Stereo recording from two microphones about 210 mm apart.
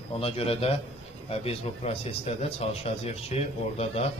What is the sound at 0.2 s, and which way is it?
A man's voice, 30° left (ahead or behind).